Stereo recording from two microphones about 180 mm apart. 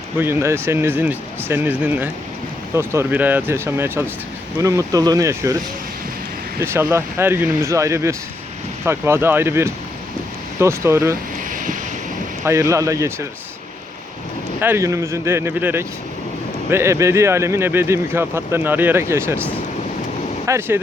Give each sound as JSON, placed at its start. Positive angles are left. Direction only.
{"t": 0.2, "sound": "speech", "side_deg": -15}
{"t": 6.6, "sound": "speech", "side_deg": -15}
{"t": 11.5, "sound": "wind noise", "side_deg": -50}
{"t": 12.5, "sound": "speech", "side_deg": -15}
{"t": 14.6, "sound": "speech", "side_deg": -15}
{"t": 20.5, "sound": "speech", "side_deg": -15}